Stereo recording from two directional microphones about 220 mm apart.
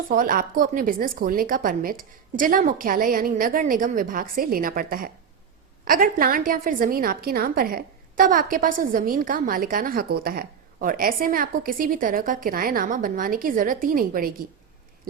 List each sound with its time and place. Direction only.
0.1 s a woman's voice: 40° right (ahead or behind)